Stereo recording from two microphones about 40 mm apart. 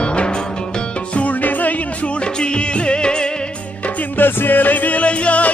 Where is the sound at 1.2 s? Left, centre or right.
Left.